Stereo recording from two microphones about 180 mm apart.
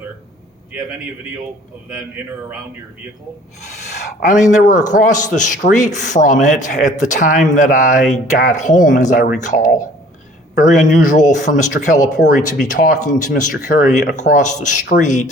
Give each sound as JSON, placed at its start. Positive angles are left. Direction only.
{"t": 4.3, "sound": "speech", "side_deg": 45}